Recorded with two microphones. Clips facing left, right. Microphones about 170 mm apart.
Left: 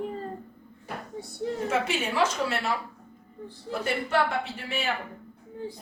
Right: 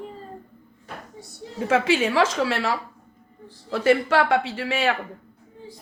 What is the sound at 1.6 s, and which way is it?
A man's voice, 90° right.